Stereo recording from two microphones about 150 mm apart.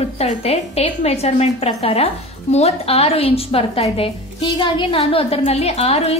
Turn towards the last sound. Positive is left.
turn(degrees=45)  # may be behind; listen again after turning